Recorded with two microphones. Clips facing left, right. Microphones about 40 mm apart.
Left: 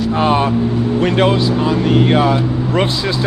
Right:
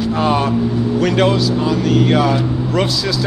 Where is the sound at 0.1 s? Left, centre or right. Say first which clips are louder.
Left 2 dB; left.